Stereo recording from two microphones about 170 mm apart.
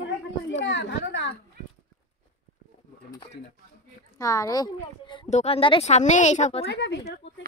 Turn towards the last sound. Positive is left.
turn(degrees=90)